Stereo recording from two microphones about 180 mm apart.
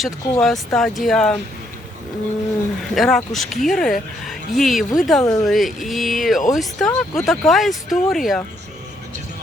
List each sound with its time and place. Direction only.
0.0 s speech: centre (ahead or behind)
2.9 s speech: centre (ahead or behind)
5.2 s speech: 20° left (ahead or behind)
5.5 s speech: centre (ahead or behind)